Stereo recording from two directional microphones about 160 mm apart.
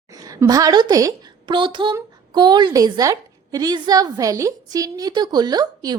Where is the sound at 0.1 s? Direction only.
20° right (ahead or behind).